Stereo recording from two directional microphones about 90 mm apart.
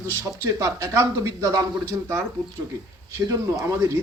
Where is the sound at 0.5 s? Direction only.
35° right (ahead or behind).